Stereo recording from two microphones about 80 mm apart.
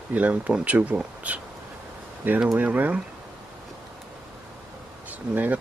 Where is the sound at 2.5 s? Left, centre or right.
Centre.